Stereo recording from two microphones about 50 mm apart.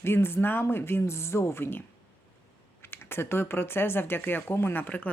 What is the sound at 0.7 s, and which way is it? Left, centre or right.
Speech, left.